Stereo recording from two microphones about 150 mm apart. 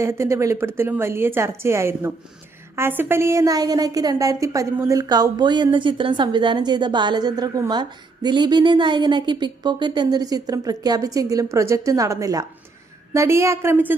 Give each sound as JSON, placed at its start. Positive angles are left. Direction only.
{"t": 0.0, "sound": "a woman's voice", "side_deg": -20}